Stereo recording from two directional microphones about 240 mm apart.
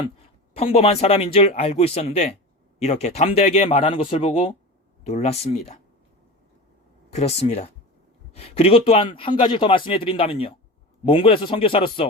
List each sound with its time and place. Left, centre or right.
0.5 s a man's voice: left
7.1 s a man's voice: left